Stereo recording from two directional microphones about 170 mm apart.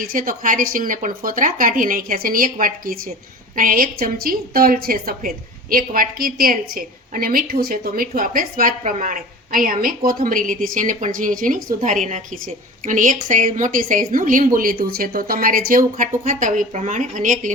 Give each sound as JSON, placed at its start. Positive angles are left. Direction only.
{"t": 0.0, "sound": "a woman's voice", "side_deg": -55}